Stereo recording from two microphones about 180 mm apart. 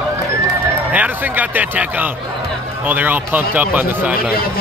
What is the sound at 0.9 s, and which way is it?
Speech, 10° right (ahead or behind).